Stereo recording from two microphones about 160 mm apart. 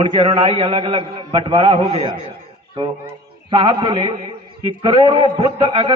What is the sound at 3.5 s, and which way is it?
A man's voice, 30° right (ahead or behind).